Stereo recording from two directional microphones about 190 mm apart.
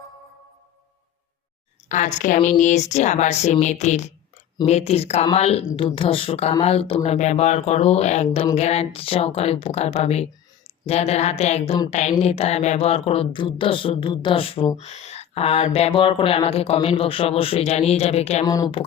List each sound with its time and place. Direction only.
1.9 s speech: 40° left (ahead or behind)
18.4 s speech: 20° left (ahead or behind)